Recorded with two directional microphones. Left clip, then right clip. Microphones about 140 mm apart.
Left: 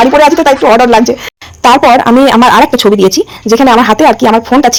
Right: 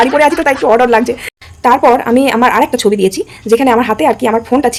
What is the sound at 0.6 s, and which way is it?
Speech, 20° left (ahead or behind).